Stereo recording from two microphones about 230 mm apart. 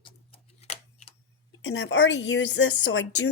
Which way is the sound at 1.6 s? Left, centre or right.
Left.